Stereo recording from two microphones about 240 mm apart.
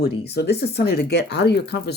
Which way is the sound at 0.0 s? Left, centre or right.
Left.